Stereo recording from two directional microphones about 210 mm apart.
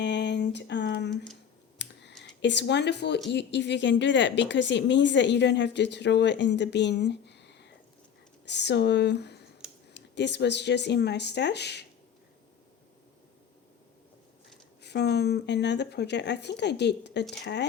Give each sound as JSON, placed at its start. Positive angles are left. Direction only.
{"t": 0.0, "sound": "a sound", "side_deg": 55}
{"t": 1.1, "sound": "speech", "side_deg": 5}
{"t": 1.8, "sound": "clicking", "side_deg": 55}
{"t": 2.2, "sound": "speech", "side_deg": 55}
{"t": 14.8, "sound": "speech", "side_deg": 55}